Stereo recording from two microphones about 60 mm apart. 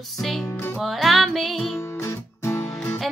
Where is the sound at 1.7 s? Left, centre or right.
Left.